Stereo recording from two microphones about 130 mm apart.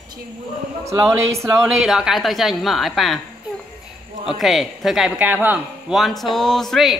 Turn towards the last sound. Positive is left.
turn(degrees=0)  # may be behind; listen again after turning